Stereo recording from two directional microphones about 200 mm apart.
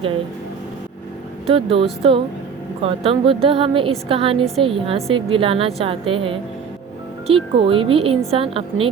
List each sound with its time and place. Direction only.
1.5 s a woman's voice: 30° right (ahead or behind)